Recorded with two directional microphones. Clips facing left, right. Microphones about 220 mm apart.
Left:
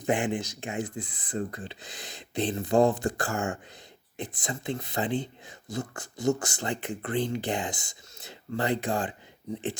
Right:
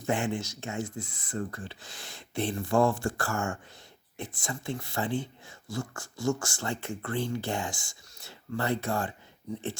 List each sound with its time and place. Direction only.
0.0 s speech: 15° left (ahead or behind)